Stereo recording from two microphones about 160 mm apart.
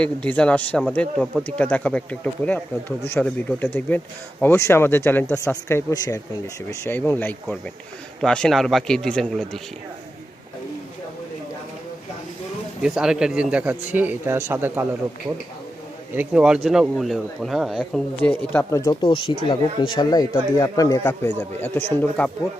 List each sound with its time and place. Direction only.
0.0 s speech: 10° left (ahead or behind)
12.8 s a man's voice: 5° right (ahead or behind)
16.1 s speech: 5° right (ahead or behind)
18.9 s speech: 30° left (ahead or behind)
21.0 s speech: 10° left (ahead or behind)